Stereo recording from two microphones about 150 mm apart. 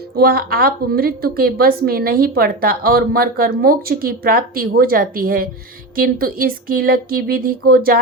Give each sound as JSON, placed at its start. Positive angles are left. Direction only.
{"t": 0.2, "sound": "a woman's voice", "side_deg": -90}